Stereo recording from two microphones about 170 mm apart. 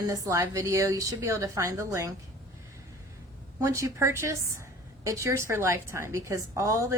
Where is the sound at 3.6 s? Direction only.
15° right (ahead or behind).